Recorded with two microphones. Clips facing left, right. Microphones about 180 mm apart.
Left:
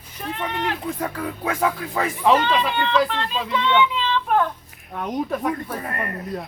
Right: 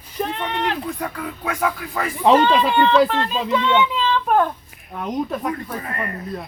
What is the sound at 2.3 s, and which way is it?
Speech, 35° right (ahead or behind).